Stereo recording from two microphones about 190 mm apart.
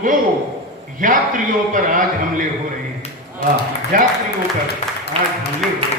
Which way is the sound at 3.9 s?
45° right (ahead or behind).